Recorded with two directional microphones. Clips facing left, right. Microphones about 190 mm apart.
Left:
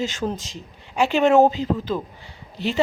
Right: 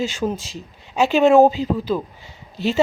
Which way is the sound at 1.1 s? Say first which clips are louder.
Right 3 dB; 10° right (ahead or behind).